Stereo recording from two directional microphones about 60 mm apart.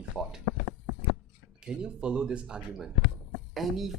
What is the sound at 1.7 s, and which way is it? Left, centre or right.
Speech, centre.